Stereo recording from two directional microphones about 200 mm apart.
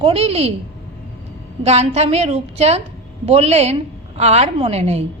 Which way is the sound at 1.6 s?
30° right (ahead or behind).